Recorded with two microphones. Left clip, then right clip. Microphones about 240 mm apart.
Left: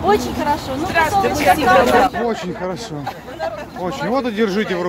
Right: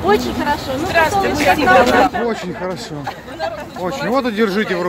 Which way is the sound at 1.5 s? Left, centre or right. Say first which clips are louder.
Right 2 dB; left.